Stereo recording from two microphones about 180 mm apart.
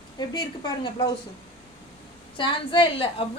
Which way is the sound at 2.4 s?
30° left (ahead or behind).